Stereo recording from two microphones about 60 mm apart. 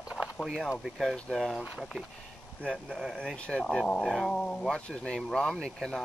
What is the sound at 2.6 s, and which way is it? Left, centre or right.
Speech, centre.